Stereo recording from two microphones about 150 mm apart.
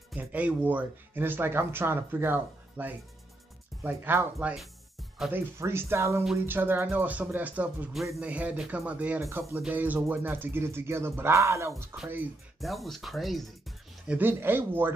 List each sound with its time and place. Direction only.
0.1 s speech: 10° right (ahead or behind)
12.5 s speech: centre (ahead or behind)
14.1 s speech: 15° right (ahead or behind)